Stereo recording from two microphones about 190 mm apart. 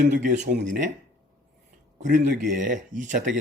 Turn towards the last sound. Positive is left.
turn(degrees=-40)  # may be behind; listen again after turning